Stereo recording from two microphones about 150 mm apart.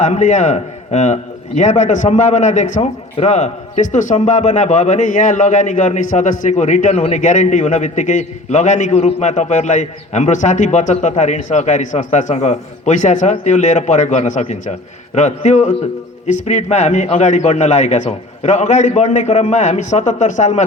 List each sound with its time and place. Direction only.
0.0 s a man's voice: 55° left (ahead or behind)